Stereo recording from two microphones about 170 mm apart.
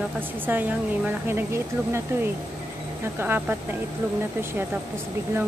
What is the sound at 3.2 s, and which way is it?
Speech, 10° right (ahead or behind).